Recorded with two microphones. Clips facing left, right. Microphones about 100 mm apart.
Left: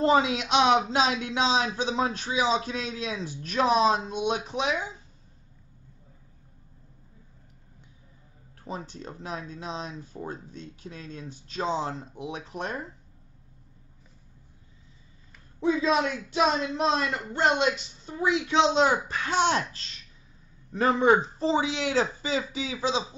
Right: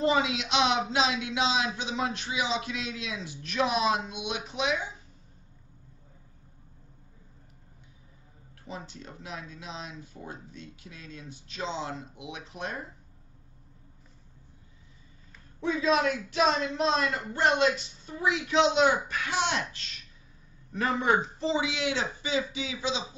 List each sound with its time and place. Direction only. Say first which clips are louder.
0.0 s a man's voice: left 4 dB; 40° left (ahead or behind)
8.6 s a man's voice: left 4 dB; 40° left (ahead or behind)
16.0 s speech: left 1 dB; 25° left (ahead or behind)
20.7 s a man's voice: left 5 dB; 30° left (ahead or behind)